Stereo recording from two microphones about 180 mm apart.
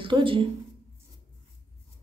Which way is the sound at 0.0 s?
30° right (ahead or behind).